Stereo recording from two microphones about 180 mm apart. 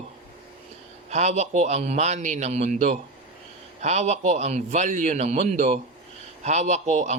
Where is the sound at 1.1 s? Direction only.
40° right (ahead or behind).